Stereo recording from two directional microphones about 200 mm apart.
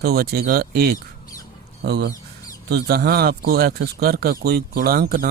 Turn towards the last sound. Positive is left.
turn(degrees=-50)  # may be behind; listen again after turning